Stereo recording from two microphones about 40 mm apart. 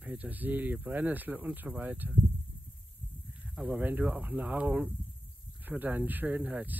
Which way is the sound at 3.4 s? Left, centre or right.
Right.